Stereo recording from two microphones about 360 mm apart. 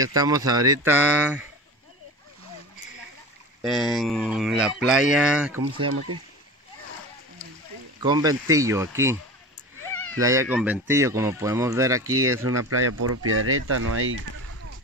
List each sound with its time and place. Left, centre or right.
0.0 s speech: centre
3.6 s speech: centre
8.0 s speech: centre
12.1 s speech: right